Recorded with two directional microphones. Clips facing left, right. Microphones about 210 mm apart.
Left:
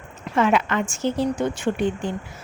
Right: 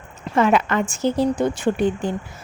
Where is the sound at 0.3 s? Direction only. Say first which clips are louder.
Right 2 dB; 40° right (ahead or behind).